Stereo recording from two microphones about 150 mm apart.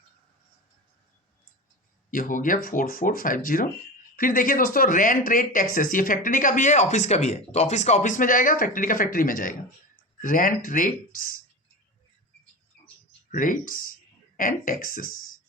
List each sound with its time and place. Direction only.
2.0 s speech: 65° left (ahead or behind)
13.3 s speech: 65° left (ahead or behind)